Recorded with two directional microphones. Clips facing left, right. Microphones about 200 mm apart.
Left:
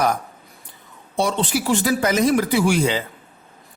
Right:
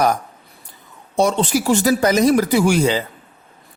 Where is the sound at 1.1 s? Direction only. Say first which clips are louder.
Right 4 dB; 45° right (ahead or behind).